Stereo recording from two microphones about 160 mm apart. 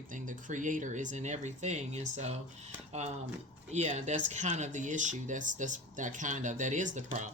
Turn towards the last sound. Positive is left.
turn(degrees=-50)  # may be behind; listen again after turning